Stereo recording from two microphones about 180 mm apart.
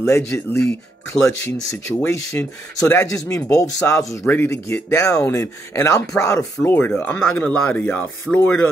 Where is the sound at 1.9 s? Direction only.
15° left (ahead or behind).